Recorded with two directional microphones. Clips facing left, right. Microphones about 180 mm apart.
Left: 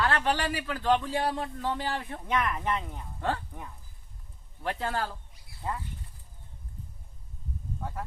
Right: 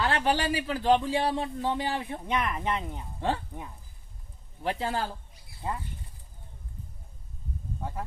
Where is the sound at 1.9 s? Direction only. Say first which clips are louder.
Even; 15° right (ahead or behind).